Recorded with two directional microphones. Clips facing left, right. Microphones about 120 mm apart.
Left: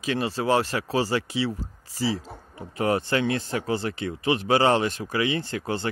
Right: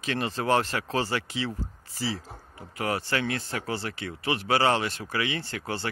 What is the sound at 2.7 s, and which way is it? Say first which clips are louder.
Speech: left 5 dB; 25° left (ahead or behind).